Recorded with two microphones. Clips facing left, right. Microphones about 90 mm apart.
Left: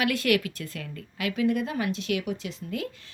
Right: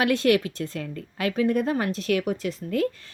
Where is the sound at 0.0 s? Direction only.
30° right (ahead or behind).